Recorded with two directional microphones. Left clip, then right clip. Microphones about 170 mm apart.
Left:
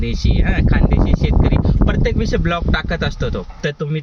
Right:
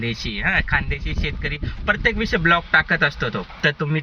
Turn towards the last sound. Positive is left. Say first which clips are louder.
# right 2 dB
turn(degrees=25)  # may be behind; listen again after turning